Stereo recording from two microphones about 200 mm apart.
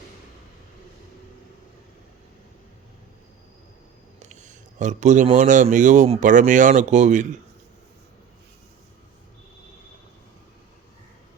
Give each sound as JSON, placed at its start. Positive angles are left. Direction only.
{"t": 4.2, "sound": "speech", "side_deg": -35}